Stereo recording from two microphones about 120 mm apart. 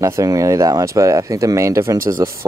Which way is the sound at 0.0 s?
25° right (ahead or behind).